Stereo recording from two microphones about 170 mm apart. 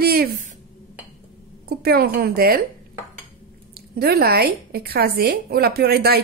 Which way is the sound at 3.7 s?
65° right (ahead or behind).